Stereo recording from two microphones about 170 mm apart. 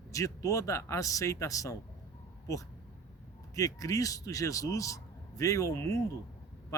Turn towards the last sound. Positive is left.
turn(degrees=20)  # may be behind; listen again after turning